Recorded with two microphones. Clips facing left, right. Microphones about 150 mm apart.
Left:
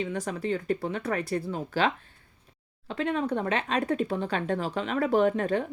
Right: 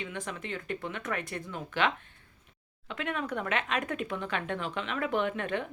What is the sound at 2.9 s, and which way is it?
Speech, 35° left (ahead or behind).